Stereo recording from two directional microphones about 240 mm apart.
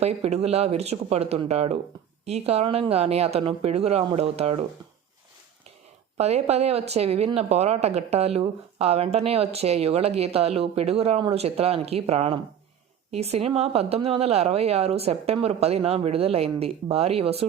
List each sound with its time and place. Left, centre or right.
0.0 s speech: right
6.1 s speech: right